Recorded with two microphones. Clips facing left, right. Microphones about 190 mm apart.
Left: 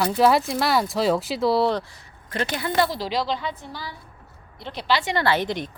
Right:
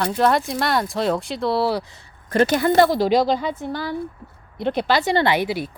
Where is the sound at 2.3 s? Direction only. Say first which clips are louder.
Right 10 dB; 45° right (ahead or behind).